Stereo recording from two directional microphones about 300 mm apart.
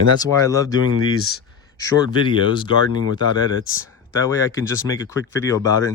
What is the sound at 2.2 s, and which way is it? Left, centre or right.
Speech, centre.